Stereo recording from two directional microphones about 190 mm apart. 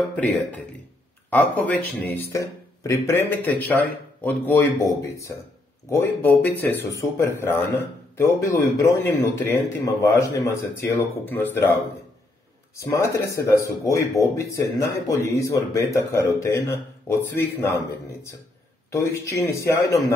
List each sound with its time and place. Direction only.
0.1 s speech: 10° left (ahead or behind)